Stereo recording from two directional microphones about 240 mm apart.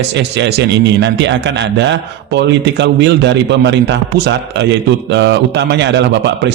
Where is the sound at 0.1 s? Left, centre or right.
Right.